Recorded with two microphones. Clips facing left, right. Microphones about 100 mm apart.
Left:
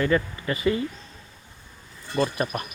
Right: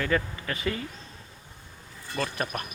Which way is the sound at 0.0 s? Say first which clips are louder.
Left 4 dB; centre (ahead or behind).